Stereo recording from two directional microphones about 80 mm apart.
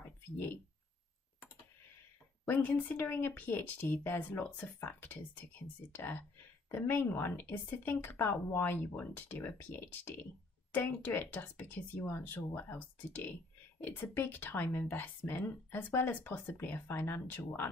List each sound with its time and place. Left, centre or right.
2.4 s speech: left